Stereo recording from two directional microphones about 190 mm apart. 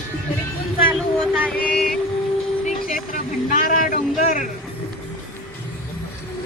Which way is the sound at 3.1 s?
45° left (ahead or behind).